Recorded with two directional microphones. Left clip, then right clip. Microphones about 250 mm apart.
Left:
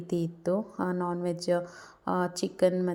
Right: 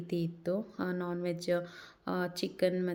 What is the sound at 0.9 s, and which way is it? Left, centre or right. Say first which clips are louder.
Speech: left 4 dB; centre.